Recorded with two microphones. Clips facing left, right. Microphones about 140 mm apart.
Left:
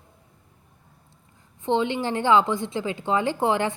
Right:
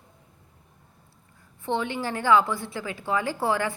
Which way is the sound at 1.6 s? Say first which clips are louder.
Left 4 dB; 20° left (ahead or behind).